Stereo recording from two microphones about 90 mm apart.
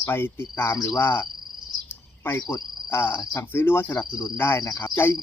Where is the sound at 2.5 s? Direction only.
30° left (ahead or behind).